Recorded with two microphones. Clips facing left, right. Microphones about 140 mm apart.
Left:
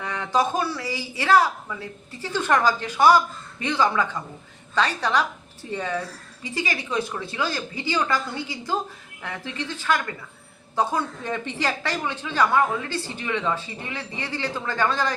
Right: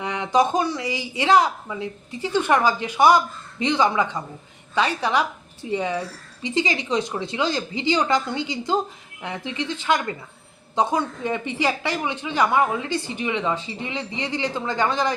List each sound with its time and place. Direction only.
0.0 s a woman's voice: 15° right (ahead or behind)